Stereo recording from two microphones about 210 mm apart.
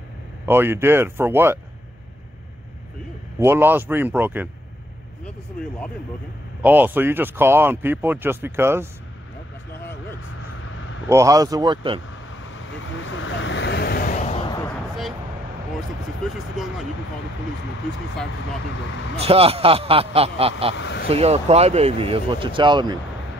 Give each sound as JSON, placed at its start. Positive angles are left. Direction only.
{"t": 0.5, "sound": "speech", "side_deg": -10}
{"t": 3.3, "sound": "speech", "side_deg": -10}
{"t": 5.2, "sound": "speech", "side_deg": 5}
{"t": 6.6, "sound": "speech", "side_deg": -10}
{"t": 11.1, "sound": "speech", "side_deg": -15}
{"t": 12.5, "sound": "vehicle", "side_deg": 65}
{"t": 16.6, "sound": "speech", "side_deg": 0}
{"t": 19.1, "sound": "speech", "side_deg": -25}
{"t": 20.7, "sound": "speech", "side_deg": 60}
{"t": 21.1, "sound": "speech", "side_deg": -30}